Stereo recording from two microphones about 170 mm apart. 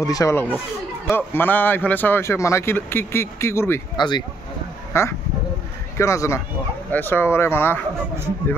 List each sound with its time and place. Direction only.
0.0 s a man's voice: 20° left (ahead or behind)